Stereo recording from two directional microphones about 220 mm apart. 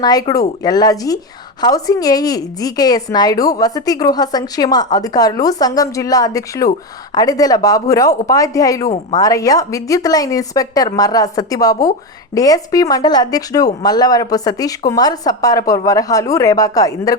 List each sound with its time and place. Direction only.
0.0 s a woman's voice: 15° left (ahead or behind)